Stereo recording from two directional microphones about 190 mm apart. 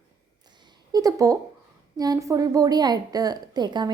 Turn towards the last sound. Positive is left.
turn(degrees=-20)  # may be behind; listen again after turning